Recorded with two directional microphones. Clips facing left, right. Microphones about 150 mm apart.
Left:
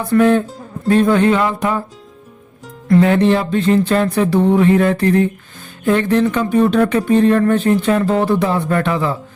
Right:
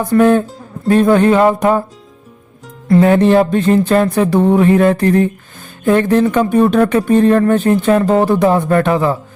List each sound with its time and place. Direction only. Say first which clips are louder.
0.0 s speech: right 2 dB; 40° right (ahead or behind)
2.9 s speech: right 3 dB; 40° right (ahead or behind)